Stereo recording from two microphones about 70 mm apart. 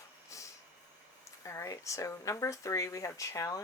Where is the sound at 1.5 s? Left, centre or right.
Left.